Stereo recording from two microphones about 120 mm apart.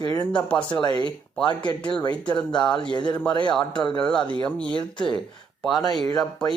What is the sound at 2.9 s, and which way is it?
Speech, 40° left (ahead or behind).